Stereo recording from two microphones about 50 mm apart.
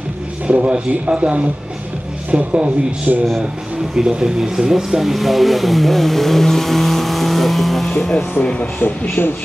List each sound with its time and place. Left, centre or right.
0.5 s speech: right
3.1 s speech: right
3.9 s speech: centre
8.5 s speech: left
8.8 s speech: left